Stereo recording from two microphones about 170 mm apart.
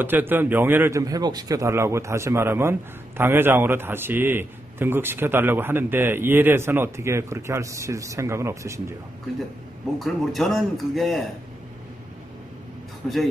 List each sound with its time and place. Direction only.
0.0 s a man's voice: 10° right (ahead or behind)
9.9 s speech: centre (ahead or behind)
13.0 s speech: 5° left (ahead or behind)